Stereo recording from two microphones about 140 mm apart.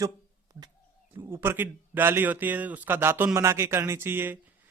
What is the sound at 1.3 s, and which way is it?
A man's voice, 15° right (ahead or behind).